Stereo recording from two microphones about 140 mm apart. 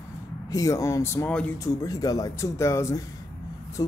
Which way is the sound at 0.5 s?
25° left (ahead or behind).